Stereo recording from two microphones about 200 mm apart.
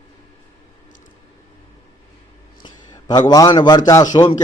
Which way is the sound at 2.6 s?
20° left (ahead or behind).